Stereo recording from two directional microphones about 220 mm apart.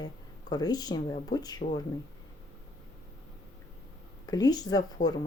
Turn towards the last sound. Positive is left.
turn(degrees=20)  # may be behind; listen again after turning